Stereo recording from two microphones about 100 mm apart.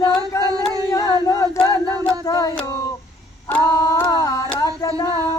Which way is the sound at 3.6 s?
40° left (ahead or behind).